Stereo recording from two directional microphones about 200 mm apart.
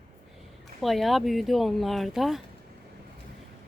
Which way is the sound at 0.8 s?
Centre (ahead or behind).